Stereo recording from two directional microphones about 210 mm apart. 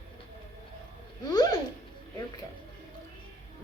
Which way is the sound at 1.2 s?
20° left (ahead or behind).